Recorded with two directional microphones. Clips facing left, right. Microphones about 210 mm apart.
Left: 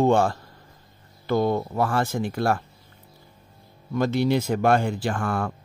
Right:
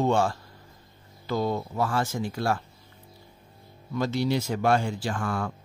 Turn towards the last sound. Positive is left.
turn(degrees=60)  # may be behind; listen again after turning